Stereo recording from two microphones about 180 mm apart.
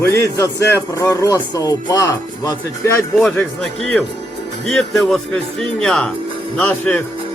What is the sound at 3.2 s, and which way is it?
Speech, 5° left (ahead or behind).